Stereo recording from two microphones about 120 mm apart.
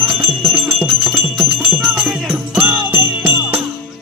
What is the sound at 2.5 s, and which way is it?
Jingle bell, 15° right (ahead or behind).